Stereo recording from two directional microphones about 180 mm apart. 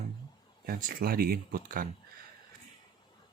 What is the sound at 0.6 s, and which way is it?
Speech, 50° right (ahead or behind).